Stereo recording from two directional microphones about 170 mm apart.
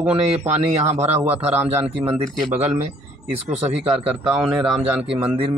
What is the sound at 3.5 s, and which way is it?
Speech, 30° right (ahead or behind).